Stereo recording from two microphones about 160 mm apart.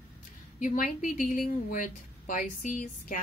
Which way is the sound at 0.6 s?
55° left (ahead or behind).